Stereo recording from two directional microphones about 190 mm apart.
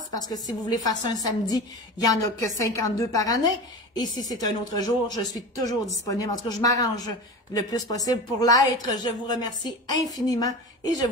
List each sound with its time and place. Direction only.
0.1 s a woman's voice: 20° left (ahead or behind)